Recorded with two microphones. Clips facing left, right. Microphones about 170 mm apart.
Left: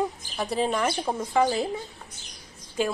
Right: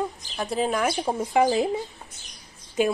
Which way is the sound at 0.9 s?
15° right (ahead or behind).